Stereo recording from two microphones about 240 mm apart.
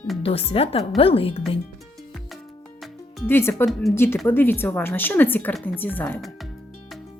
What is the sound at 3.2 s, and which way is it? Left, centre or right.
A woman's voice, centre.